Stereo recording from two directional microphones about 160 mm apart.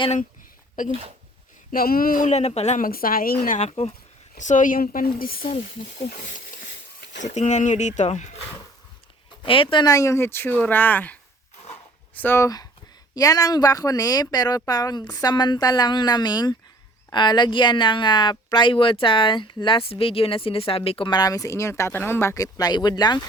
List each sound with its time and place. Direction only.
1.7 s speech: 65° left (ahead or behind)
3.4 s speech: 50° left (ahead or behind)
4.4 s speech: 50° left (ahead or behind)
5.4 s speech: 40° left (ahead or behind)
6.1 s speech: 55° left (ahead or behind)
9.4 s speech: 35° left (ahead or behind)